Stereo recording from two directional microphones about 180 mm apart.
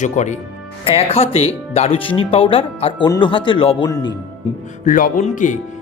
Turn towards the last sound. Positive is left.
turn(degrees=45)  # may be behind; listen again after turning